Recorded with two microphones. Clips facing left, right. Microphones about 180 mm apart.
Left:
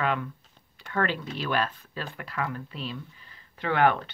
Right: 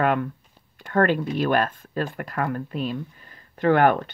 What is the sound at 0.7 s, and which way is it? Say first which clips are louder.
Speech: right 8 dB; 50° right (ahead or behind).